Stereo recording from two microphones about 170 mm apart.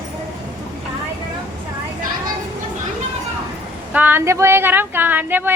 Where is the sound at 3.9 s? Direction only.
10° right (ahead or behind).